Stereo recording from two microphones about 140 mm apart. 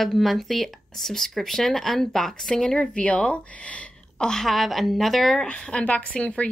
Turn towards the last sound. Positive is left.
turn(degrees=10)  # may be behind; listen again after turning